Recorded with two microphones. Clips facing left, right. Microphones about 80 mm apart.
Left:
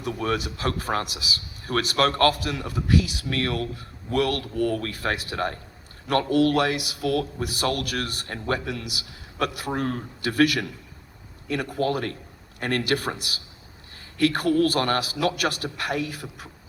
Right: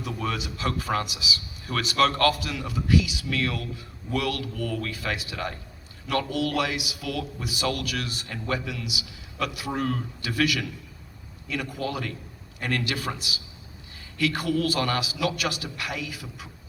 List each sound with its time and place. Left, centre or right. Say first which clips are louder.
0.0 s a man's voice: left 4 dB; left